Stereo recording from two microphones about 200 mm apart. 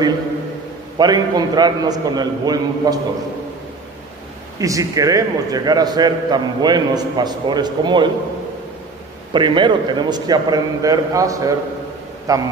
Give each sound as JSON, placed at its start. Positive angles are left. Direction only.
{"t": 0.9, "sound": "a man's voice", "side_deg": -20}
{"t": 4.6, "sound": "a man's voice", "side_deg": -15}
{"t": 9.3, "sound": "a man's voice", "side_deg": -25}